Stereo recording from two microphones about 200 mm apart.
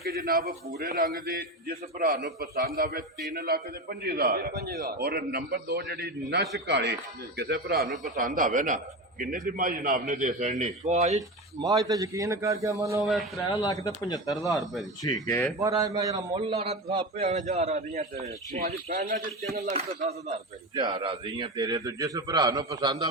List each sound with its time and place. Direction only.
0.0 s a man's voice: 50° right (ahead or behind)
11.6 s a man's voice: 20° right (ahead or behind)
13.0 s speech: centre (ahead or behind)
13.5 s speech: 20° left (ahead or behind)
14.6 s speech: centre (ahead or behind)
15.0 s speech: 15° left (ahead or behind)
15.6 s a man's voice: 15° right (ahead or behind)
16.3 s a man's voice: 30° right (ahead or behind)
18.9 s a man's voice: 45° right (ahead or behind)
19.7 s a man's voice: 30° right (ahead or behind)
20.7 s a man's voice: 20° right (ahead or behind)